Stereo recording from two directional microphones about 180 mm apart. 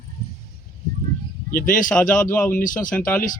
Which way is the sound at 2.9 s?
10° left (ahead or behind).